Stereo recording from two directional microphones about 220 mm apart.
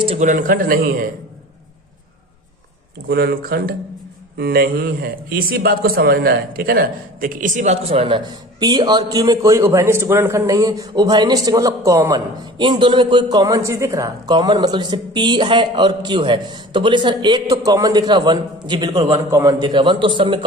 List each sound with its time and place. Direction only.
0.0 s a man's voice: 30° right (ahead or behind)
3.1 s a man's voice: 45° right (ahead or behind); by 20.4 s 20° right (ahead or behind)